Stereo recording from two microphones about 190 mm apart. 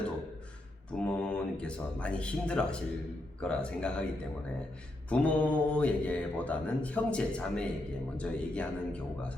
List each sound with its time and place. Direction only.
0.9 s speech: 5° left (ahead or behind)